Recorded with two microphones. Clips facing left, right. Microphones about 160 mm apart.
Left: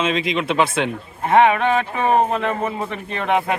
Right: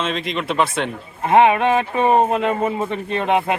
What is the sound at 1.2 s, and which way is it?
Speech, 20° right (ahead or behind).